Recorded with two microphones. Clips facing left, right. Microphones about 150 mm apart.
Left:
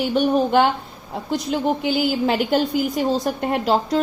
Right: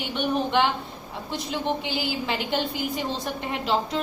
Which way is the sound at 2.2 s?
45° left (ahead or behind).